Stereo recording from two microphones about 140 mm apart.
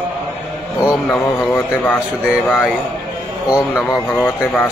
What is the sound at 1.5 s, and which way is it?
Speech, 15° left (ahead or behind).